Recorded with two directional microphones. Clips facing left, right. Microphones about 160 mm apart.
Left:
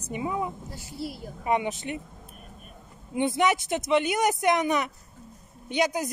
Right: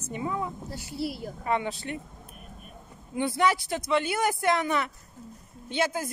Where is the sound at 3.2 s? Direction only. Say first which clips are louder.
Left 1 dB; 20° left (ahead or behind).